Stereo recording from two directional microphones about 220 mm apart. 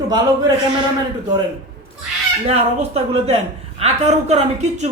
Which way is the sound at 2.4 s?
30° right (ahead or behind).